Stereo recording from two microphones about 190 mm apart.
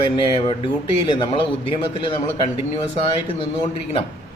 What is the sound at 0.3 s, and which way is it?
A man's voice, 25° left (ahead or behind).